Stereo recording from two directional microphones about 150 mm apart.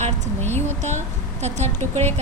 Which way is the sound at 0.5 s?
50° right (ahead or behind).